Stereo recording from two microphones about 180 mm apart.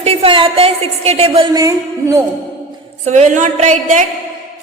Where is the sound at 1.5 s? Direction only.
20° right (ahead or behind).